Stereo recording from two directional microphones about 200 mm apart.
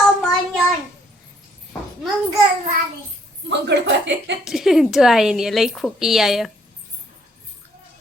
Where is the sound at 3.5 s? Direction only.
60° right (ahead or behind).